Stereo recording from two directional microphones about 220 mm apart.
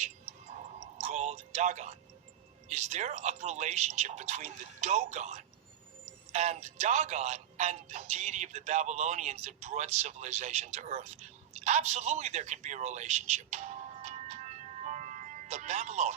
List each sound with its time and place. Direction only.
0.9 s music: 30° right (ahead or behind)
2.6 s speech: 30° right (ahead or behind)